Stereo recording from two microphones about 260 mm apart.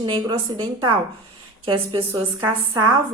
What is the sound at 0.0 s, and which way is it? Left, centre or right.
A woman's voice, centre.